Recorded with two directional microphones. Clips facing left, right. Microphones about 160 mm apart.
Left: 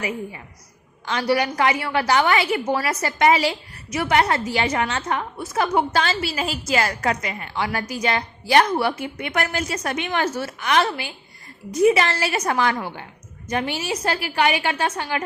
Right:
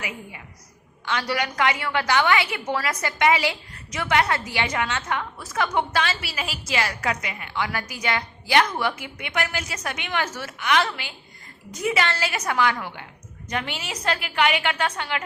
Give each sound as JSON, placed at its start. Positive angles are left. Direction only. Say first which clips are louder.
{"t": 1.0, "sound": "a woman's voice", "louder": "left 5 dB", "side_deg": 30}